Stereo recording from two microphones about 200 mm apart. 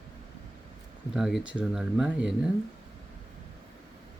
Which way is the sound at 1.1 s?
Centre (ahead or behind).